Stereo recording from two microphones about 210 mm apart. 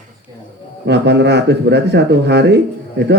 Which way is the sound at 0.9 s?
55° right (ahead or behind).